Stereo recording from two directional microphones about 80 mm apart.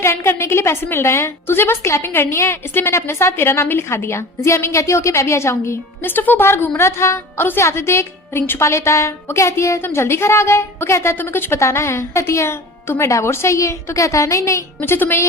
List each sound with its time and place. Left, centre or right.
0.0 s a woman's voice: left
14.8 s a woman's voice: left